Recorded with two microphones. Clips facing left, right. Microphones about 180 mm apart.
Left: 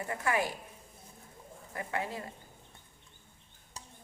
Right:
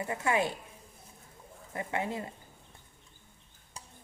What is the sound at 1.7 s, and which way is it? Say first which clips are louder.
Speech: right 3 dB; 20° right (ahead or behind).